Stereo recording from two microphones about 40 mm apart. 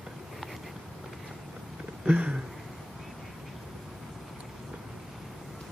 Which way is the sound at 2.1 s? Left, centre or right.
Right.